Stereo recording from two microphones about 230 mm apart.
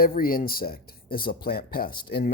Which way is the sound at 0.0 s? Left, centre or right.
Left.